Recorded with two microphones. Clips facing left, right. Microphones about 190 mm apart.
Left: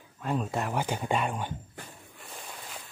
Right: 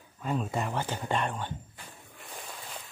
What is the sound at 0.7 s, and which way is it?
Speech, 10° left (ahead or behind).